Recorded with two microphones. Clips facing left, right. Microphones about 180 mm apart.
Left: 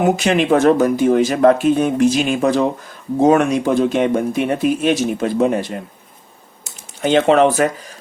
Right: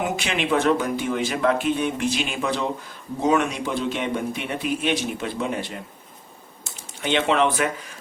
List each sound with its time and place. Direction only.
0.0 s speech: 45° left (ahead or behind)
7.0 s speech: 40° left (ahead or behind)